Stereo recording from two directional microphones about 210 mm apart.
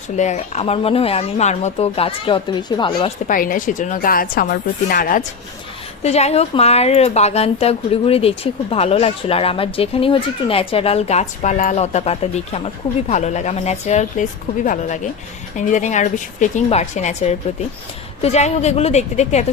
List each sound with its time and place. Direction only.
0.2 s a woman's voice: 30° left (ahead or behind)
3.2 s a woman's voice: 40° left (ahead or behind)
6.0 s a woman's voice: 30° left (ahead or behind)